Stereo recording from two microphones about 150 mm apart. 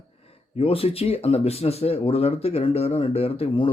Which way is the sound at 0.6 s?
40° left (ahead or behind).